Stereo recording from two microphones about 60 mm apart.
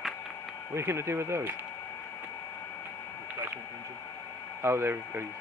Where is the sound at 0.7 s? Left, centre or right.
Right.